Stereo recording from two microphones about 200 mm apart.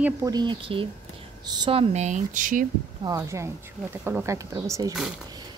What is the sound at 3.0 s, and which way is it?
A woman's voice, 15° right (ahead or behind).